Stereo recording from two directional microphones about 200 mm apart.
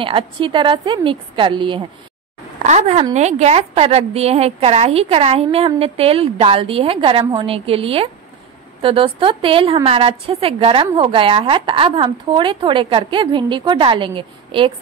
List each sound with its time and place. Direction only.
0.0 s a woman's voice: 25° right (ahead or behind)
2.6 s a woman's voice: 35° right (ahead or behind)